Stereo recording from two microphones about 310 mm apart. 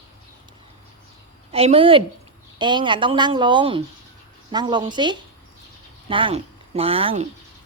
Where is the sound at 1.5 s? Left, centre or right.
Centre.